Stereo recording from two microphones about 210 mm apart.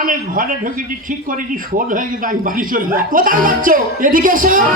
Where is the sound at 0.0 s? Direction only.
40° right (ahead or behind).